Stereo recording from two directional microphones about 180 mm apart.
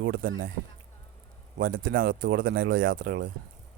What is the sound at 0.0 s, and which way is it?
Speech, 90° right.